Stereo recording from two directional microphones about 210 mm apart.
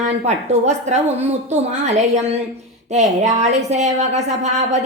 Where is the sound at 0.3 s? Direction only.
35° right (ahead or behind).